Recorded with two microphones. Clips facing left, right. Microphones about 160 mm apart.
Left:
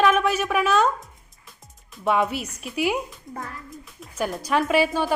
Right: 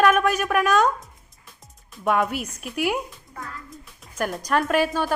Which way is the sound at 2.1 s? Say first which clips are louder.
Even; centre (ahead or behind).